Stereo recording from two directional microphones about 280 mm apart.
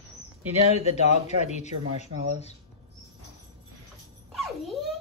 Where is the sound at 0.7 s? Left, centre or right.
Left.